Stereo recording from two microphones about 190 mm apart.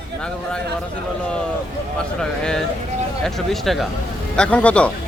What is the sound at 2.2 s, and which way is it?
A man's voice, 5° left (ahead or behind).